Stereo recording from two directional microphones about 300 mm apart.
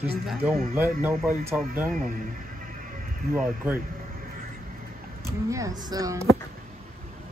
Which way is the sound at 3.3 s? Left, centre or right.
Centre.